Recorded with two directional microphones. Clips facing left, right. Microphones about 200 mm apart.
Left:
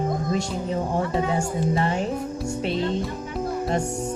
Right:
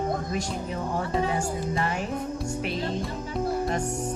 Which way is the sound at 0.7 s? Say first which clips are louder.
Left 6 dB; 30° left (ahead or behind).